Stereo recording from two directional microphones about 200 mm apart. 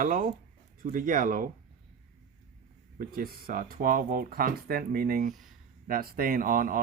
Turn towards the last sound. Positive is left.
turn(degrees=-45)  # may be behind; listen again after turning